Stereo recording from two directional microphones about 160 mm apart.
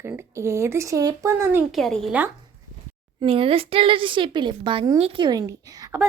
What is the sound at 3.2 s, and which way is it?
Speech, 35° right (ahead or behind).